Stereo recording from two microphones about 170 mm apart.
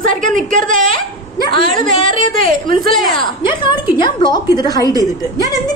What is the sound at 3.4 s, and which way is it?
A woman's voice, 30° left (ahead or behind).